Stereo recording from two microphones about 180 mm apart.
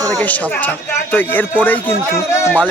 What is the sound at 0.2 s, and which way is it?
Speech, 10° left (ahead or behind).